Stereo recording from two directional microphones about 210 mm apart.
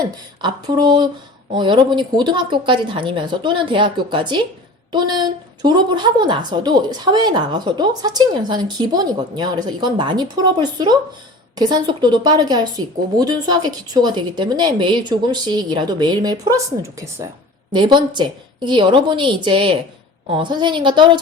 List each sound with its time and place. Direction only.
0.4 s a woman's voice: 20° right (ahead or behind)